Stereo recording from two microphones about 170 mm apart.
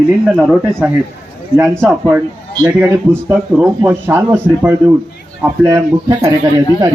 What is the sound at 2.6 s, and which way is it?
Speech, 15° right (ahead or behind).